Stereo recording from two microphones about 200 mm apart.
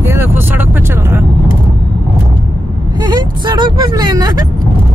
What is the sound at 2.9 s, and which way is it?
Speech, 20° right (ahead or behind).